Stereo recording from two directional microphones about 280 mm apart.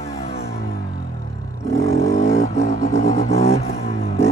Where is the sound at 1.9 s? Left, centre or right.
Left.